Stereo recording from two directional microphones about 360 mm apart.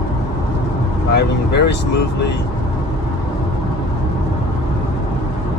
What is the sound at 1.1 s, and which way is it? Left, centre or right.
Speech, left.